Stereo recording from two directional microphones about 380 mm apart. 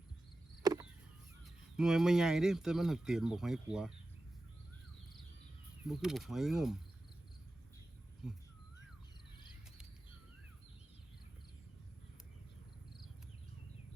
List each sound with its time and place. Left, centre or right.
0.6 s a sound: centre
1.7 s speech: centre
5.9 s speech: centre
8.2 s speech: centre